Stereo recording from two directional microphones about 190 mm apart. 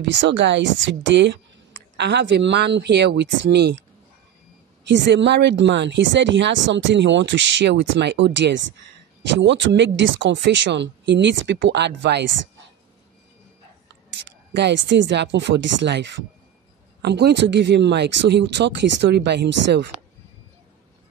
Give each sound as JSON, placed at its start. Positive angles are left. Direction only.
{"t": 0.0, "sound": "speech", "side_deg": -70}
{"t": 4.8, "sound": "speech", "side_deg": -65}
{"t": 14.5, "sound": "speech", "side_deg": -65}